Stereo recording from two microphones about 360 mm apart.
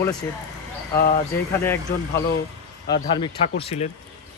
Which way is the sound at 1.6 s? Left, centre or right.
Centre.